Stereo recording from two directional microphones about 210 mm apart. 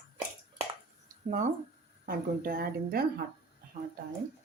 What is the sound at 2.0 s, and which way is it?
Speech, 45° right (ahead or behind).